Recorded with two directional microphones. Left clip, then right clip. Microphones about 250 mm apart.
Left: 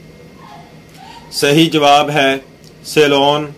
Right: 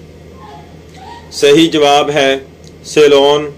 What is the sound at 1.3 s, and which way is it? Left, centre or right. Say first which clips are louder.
Mantra: right 4 dB; left.